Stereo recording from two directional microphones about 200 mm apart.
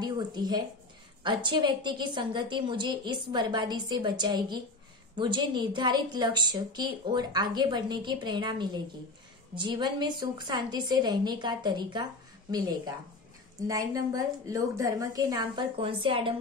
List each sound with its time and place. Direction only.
0.0 s a woman's voice: 20° right (ahead or behind)